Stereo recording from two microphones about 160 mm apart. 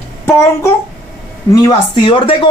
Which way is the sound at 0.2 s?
15° left (ahead or behind).